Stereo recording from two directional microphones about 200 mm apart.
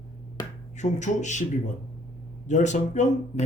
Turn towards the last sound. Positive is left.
turn(degrees=35)  # may be behind; listen again after turning